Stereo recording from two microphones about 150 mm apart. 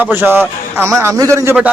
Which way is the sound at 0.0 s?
15° right (ahead or behind).